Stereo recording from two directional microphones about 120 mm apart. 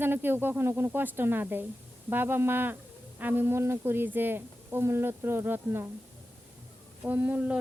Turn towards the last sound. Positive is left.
turn(degrees=-15)  # may be behind; listen again after turning